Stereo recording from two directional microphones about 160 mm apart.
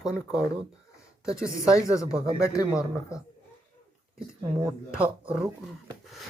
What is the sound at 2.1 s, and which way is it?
Speech, 20° left (ahead or behind).